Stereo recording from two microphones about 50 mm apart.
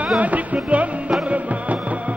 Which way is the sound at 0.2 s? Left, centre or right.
Right.